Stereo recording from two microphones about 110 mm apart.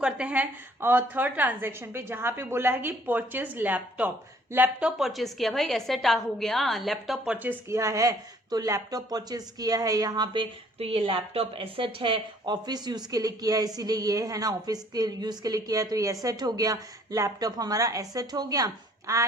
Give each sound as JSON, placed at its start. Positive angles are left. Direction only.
{"t": 0.0, "sound": "a woman's voice", "side_deg": -10}
{"t": 7.3, "sound": "a woman's voice", "side_deg": -15}
{"t": 7.8, "sound": "a woman's voice", "side_deg": -30}
{"t": 10.3, "sound": "a woman's voice", "side_deg": -55}